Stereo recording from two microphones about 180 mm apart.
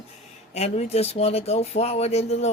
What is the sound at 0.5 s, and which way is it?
Speech, 35° left (ahead or behind).